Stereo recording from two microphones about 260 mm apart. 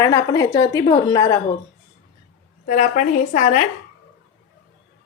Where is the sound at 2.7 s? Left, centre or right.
Left.